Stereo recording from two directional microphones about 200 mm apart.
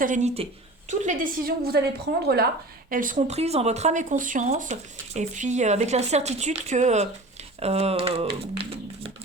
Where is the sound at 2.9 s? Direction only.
40° right (ahead or behind).